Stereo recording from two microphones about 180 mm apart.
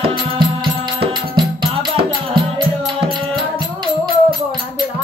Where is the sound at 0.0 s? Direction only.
30° right (ahead or behind).